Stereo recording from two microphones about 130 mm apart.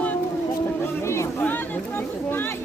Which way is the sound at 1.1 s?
20° left (ahead or behind).